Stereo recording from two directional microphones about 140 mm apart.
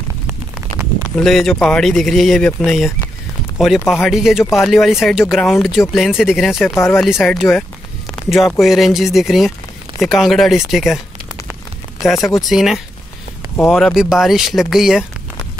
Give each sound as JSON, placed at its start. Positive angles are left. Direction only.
{"t": 1.1, "sound": "speech", "side_deg": 5}
{"t": 6.7, "sound": "speech", "side_deg": 15}
{"t": 7.0, "sound": "speech", "side_deg": 0}
{"t": 12.0, "sound": "speech", "side_deg": 0}